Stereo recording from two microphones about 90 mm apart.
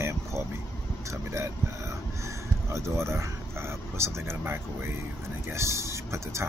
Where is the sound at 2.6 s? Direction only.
30° right (ahead or behind).